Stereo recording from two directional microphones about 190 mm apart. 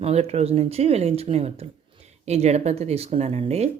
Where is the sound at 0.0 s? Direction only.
35° right (ahead or behind).